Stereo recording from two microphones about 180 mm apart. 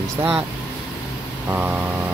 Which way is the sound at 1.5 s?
10° right (ahead or behind).